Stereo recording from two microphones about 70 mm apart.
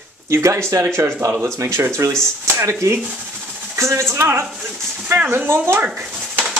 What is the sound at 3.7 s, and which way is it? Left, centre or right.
Speech, right.